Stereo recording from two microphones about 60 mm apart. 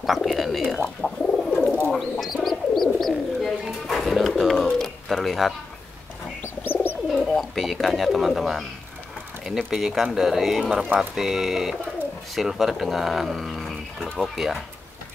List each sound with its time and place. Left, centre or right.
0.0 s speech: centre
0.8 s bird: centre
2.0 s bird: centre
6.6 s bird: left
7.3 s speech: centre